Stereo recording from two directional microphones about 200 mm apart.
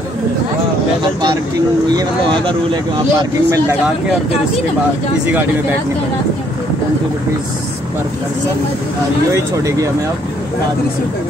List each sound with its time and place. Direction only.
1.9 s speech: 20° right (ahead or behind)
5.2 s speech: 10° right (ahead or behind)
9.3 s speech: 15° right (ahead or behind)